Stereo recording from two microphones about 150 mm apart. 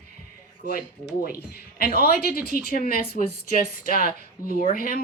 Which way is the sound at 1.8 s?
80° left.